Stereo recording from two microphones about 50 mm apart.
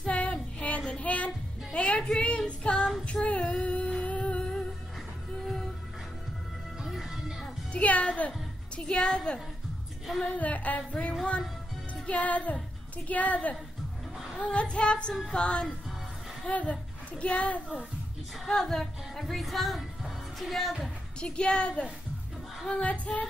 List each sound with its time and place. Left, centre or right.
0.0 s child singing: left
3.1 s female singing: left
4.0 s music: left
6.8 s music: centre
7.7 s music: left
8.7 s a woman's voice: centre
10.3 s speech: left
14.1 s a sound: centre
14.4 s speech: left
18.4 s music: centre
21.2 s speech: centre